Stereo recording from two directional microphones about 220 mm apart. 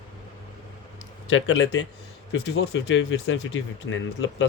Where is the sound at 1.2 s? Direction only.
60° left (ahead or behind).